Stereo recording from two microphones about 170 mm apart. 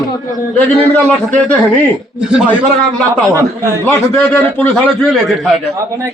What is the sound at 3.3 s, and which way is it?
Speech, 15° right (ahead or behind).